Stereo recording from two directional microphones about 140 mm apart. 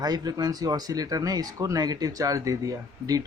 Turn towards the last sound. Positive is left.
turn(degrees=-25)  # may be behind; listen again after turning